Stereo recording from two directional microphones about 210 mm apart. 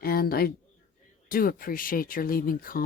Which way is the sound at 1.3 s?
45° left (ahead or behind).